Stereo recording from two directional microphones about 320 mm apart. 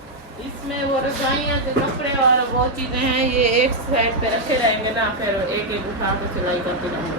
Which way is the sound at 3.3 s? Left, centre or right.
Right.